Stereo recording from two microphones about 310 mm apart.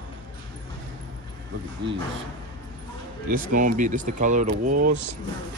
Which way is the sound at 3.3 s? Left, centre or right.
Right.